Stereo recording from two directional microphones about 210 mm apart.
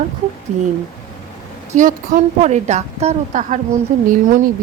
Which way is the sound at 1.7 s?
40° right (ahead or behind).